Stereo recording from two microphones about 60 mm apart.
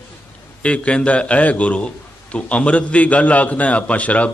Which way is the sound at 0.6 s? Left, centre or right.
Centre.